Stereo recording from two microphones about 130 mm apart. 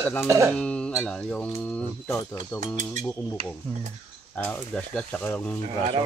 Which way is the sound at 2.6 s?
70° right (ahead or behind).